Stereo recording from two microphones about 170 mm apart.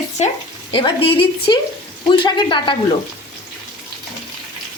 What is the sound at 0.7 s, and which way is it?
A woman's voice, 30° left (ahead or behind).